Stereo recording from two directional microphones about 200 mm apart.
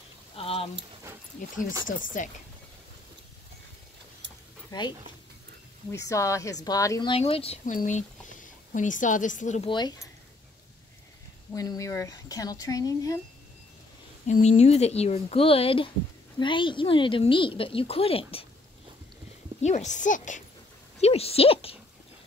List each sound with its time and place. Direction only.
0.4 s a sound: 30° left (ahead or behind)
1.9 s speech: 40° left (ahead or behind)
4.6 s speech: 20° left (ahead or behind)
6.0 s speech: 15° left (ahead or behind); by 9.7 s 40° left (ahead or behind)
9.7 s a woman's voice: 20° left (ahead or behind)
11.5 s speech: 20° left (ahead or behind)
14.2 s a woman's voice: 40° left (ahead or behind)
19.6 s a woman's voice: 35° left (ahead or behind)